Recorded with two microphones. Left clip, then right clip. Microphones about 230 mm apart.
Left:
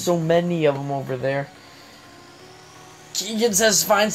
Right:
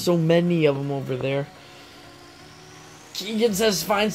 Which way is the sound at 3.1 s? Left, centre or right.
Centre.